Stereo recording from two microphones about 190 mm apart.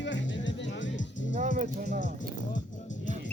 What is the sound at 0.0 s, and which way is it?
Music, 70° left (ahead or behind).